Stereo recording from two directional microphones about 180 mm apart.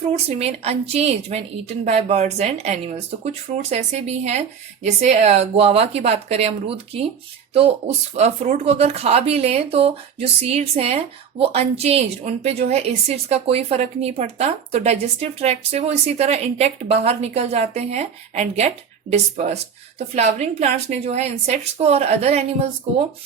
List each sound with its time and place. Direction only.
0.3 s a woman's voice: 35° right (ahead or behind)